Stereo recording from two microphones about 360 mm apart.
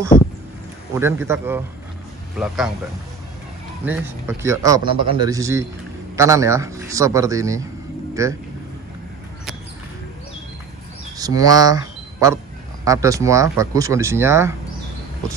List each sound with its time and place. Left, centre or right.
0.1 s speech: left
0.9 s a man's voice: centre
3.8 s a man's voice: centre
11.1 s a man's voice: centre